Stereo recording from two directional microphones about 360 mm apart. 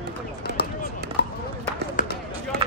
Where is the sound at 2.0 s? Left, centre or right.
Left.